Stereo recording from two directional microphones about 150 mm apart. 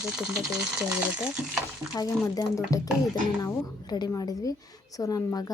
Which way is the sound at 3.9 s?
25° left (ahead or behind).